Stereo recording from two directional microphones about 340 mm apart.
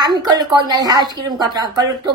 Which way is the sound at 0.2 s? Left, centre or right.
Centre.